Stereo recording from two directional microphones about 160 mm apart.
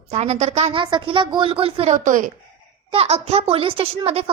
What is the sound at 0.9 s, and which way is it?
A woman's voice, 30° right (ahead or behind).